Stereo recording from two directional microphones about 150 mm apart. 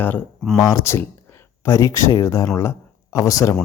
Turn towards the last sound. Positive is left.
turn(degrees=20)  # may be behind; listen again after turning